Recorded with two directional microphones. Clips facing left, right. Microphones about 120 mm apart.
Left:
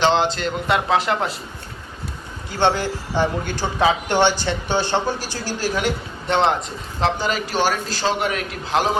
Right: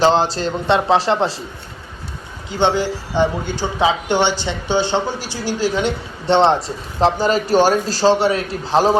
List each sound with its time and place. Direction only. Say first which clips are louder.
0.0 s speech: right 3 dB; 35° right (ahead or behind)
2.5 s a man's voice: right 2 dB; 20° right (ahead or behind); by 9.0 s 35° right (ahead or behind)